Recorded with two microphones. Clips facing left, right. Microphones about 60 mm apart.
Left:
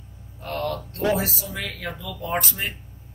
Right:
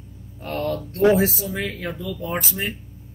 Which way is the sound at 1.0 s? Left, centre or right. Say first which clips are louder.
Right 7 dB; right.